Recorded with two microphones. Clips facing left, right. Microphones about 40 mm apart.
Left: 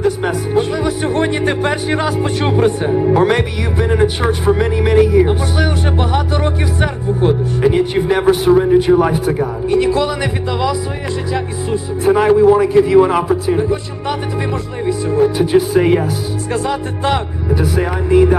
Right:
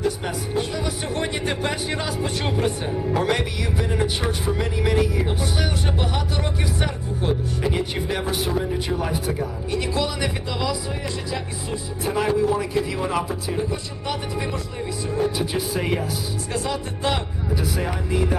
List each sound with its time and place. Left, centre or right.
0.0 s speech: left